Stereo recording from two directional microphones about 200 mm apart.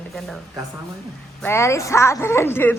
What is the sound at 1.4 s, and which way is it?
A woman's voice, 15° left (ahead or behind).